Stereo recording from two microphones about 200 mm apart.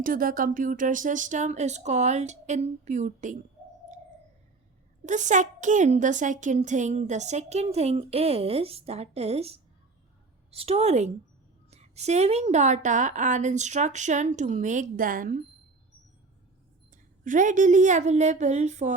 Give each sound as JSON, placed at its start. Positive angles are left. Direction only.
{"t": 0.0, "sound": "a woman's voice", "side_deg": -45}
{"t": 5.0, "sound": "a woman's voice", "side_deg": -40}
{"t": 16.9, "sound": "a woman's voice", "side_deg": -40}